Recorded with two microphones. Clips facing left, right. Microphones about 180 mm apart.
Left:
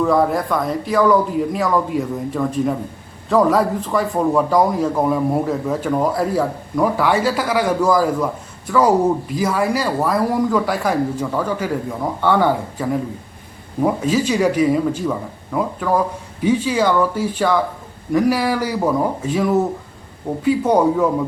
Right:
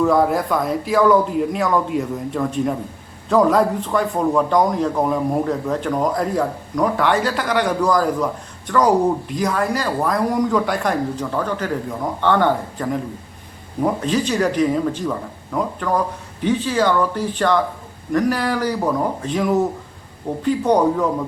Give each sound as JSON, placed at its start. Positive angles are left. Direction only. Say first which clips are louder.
{"t": 0.0, "sound": "a man's voice", "louder": "even", "side_deg": 0}